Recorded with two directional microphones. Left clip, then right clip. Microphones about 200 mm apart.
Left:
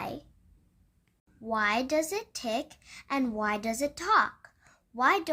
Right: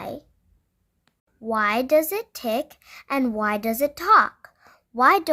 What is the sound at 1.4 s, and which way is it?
A woman's voice, 45° right (ahead or behind).